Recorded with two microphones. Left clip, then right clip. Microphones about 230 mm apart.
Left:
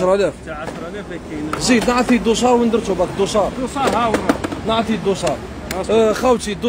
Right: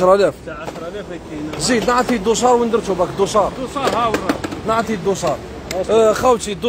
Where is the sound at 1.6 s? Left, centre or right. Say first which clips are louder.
Even; centre.